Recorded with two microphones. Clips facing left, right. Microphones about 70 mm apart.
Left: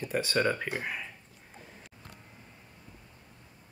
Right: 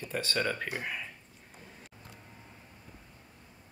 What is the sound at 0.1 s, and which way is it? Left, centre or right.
Speech, centre.